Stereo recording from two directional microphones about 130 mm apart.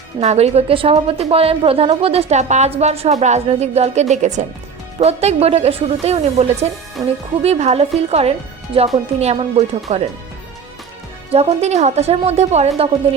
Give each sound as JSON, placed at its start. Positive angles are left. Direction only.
{"t": 0.2, "sound": "a woman's voice", "side_deg": -55}
{"t": 4.9, "sound": "a woman's voice", "side_deg": -55}
{"t": 9.9, "sound": "speech", "side_deg": -60}
{"t": 11.3, "sound": "speech", "side_deg": -55}